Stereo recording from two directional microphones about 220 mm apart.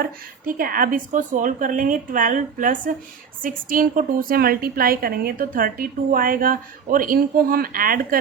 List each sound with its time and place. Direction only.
0.0 s a woman's voice: 40° right (ahead or behind)